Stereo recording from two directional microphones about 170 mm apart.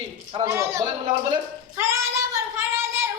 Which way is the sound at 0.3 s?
20° right (ahead or behind).